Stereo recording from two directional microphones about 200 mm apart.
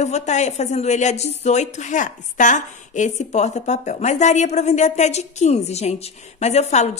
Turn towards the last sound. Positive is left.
turn(degrees=35)  # may be behind; listen again after turning